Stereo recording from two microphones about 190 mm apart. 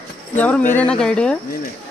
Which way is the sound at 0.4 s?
10° left (ahead or behind).